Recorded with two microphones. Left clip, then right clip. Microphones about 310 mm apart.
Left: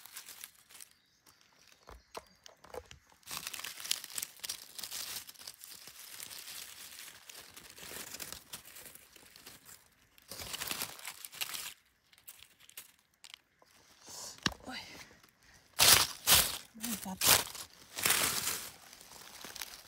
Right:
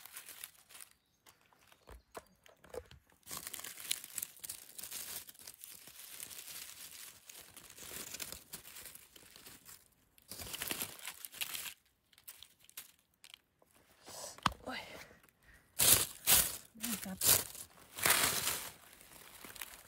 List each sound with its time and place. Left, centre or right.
0.0 s crumpling: centre
3.3 s crumpling: centre
14.1 s whispering: centre
15.8 s a sound: centre
18.0 s crushing: centre
19.4 s a sound: centre